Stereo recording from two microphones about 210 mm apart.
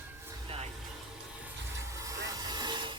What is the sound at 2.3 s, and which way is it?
Music, 20° right (ahead or behind).